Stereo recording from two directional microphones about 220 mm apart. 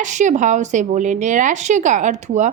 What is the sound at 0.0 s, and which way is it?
A woman's voice, 35° right (ahead or behind).